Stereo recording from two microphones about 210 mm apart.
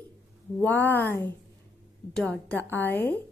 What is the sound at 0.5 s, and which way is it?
A woman's voice, 10° left (ahead or behind).